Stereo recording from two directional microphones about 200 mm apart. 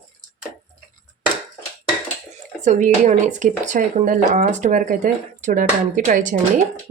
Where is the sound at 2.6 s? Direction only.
35° right (ahead or behind).